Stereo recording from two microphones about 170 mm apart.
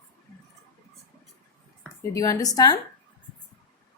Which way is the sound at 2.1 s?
20° left (ahead or behind).